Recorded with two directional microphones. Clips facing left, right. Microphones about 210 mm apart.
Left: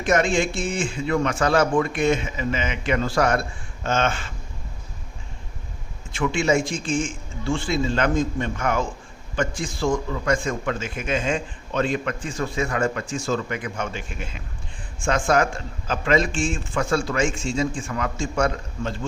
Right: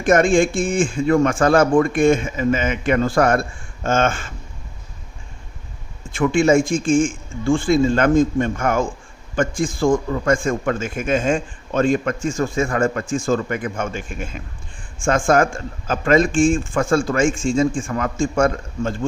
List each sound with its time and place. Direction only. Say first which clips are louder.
0.0 s a man's voice: right 6 dB; 50° right (ahead or behind)
6.1 s a man's voice: right 6 dB; 50° right (ahead or behind)